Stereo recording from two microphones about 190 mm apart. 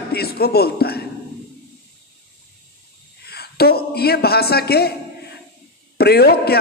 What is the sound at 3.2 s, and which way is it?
A man's voice, 55° left (ahead or behind).